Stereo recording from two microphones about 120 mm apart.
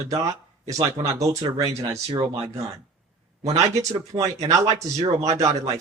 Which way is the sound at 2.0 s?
45° right (ahead or behind).